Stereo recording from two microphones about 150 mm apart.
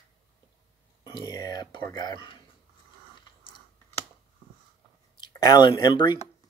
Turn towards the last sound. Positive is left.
turn(degrees=30)  # may be behind; listen again after turning